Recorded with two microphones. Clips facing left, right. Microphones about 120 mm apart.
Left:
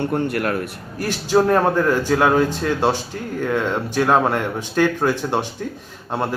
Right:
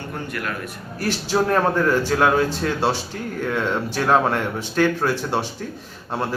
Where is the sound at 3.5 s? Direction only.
15° left (ahead or behind).